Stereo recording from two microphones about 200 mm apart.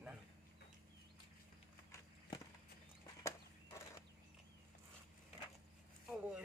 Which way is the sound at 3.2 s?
15° left (ahead or behind).